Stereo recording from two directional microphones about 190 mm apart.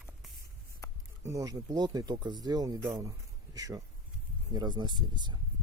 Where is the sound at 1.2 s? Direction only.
15° right (ahead or behind).